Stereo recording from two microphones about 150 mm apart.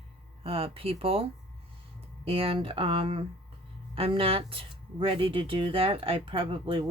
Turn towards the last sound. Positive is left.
turn(degrees=-35)  # may be behind; listen again after turning